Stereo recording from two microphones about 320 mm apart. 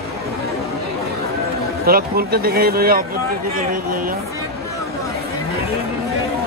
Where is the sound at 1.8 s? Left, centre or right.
Right.